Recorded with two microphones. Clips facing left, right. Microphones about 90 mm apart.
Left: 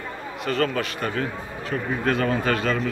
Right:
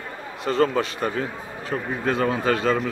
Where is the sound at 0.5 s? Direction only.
25° right (ahead or behind).